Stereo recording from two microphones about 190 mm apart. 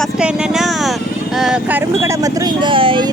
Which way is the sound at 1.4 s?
5° right (ahead or behind).